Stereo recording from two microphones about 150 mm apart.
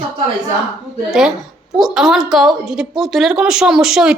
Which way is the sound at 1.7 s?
Centre (ahead or behind).